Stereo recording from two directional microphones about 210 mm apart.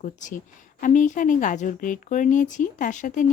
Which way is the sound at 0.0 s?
35° left (ahead or behind).